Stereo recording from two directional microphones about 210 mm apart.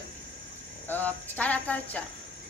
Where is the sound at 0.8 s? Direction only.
10° left (ahead or behind).